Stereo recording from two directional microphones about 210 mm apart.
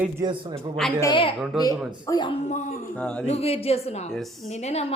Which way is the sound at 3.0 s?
5° left (ahead or behind).